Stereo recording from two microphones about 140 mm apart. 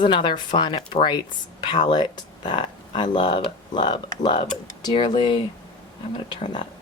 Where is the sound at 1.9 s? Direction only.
30° left (ahead or behind).